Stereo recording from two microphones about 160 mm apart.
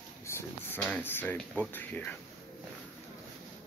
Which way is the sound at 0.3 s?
15° left (ahead or behind).